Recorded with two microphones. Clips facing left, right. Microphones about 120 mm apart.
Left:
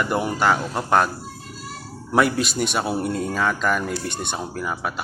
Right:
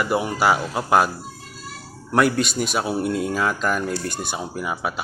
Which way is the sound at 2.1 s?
Centre (ahead or behind).